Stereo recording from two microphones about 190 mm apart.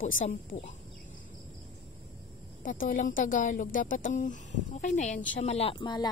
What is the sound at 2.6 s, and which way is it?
A woman's voice, 45° left (ahead or behind).